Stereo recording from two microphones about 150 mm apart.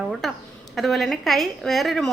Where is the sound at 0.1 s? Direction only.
Centre (ahead or behind).